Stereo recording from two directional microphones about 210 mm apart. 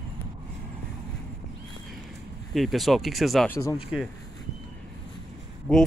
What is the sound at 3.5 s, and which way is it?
Speech, 15° left (ahead or behind).